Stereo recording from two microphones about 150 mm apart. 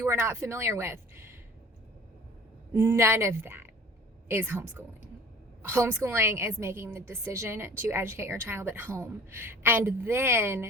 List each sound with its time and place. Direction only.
0.0 s a woman's voice: 15° right (ahead or behind)
2.7 s a woman's voice: 15° right (ahead or behind)